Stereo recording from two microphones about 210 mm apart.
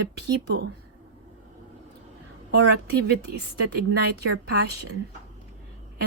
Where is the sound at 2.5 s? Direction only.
50° right (ahead or behind).